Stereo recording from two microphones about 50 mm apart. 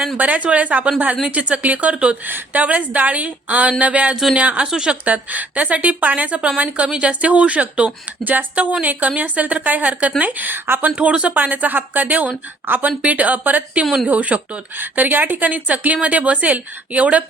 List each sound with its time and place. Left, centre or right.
0.2 s a woman's voice: right
2.2 s speech: right
4.1 s speech: centre
4.4 s speech: right
4.6 s a woman's voice: centre
5.0 s a woman's voice: right
10.9 s speech: right
11.3 s a woman's voice: right
13.0 s a woman's voice: right